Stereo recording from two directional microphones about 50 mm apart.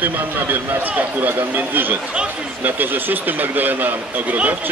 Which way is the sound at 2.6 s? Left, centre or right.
Right.